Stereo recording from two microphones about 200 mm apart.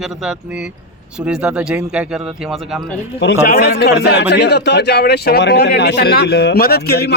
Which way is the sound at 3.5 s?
50° left (ahead or behind).